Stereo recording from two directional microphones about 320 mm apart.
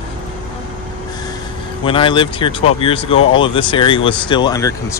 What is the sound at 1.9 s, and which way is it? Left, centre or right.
Speech, centre.